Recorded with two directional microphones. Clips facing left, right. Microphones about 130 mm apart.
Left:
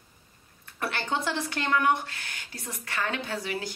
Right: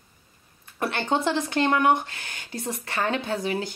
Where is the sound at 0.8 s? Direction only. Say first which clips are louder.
Right 5 dB; 25° right (ahead or behind).